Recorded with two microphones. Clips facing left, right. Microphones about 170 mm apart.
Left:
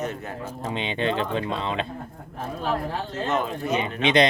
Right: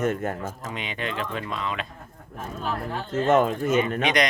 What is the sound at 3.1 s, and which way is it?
Speech, 50° right (ahead or behind).